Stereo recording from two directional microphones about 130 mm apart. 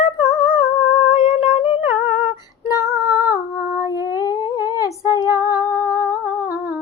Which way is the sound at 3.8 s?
30° left (ahead or behind).